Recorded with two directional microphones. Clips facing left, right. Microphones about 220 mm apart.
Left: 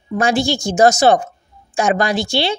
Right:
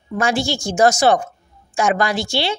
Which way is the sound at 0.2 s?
20° left (ahead or behind).